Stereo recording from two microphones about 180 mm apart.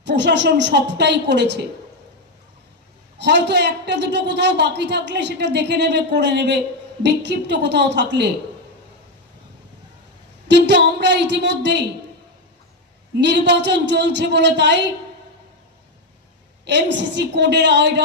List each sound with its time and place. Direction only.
0.0 s a man's voice: 75° right (ahead or behind)
3.2 s a man's voice: 75° right (ahead or behind)
10.5 s a man's voice: 75° right (ahead or behind)
13.1 s a man's voice: 75° right (ahead or behind)
16.6 s a man's voice: 75° right (ahead or behind)